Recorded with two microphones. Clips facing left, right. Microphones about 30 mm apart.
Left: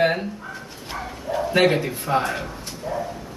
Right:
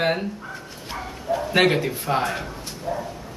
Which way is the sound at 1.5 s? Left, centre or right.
Centre.